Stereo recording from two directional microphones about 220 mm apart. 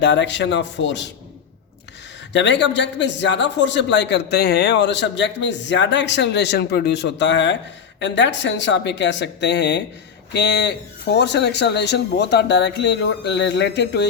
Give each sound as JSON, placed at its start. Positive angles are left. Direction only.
{"t": 0.0, "sound": "speech", "side_deg": 55}
{"t": 2.3, "sound": "speech", "side_deg": 55}